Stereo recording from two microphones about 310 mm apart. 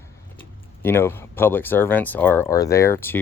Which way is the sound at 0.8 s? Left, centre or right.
Centre.